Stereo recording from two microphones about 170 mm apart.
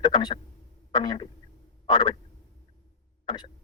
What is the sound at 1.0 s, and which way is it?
Speech, 25° left (ahead or behind).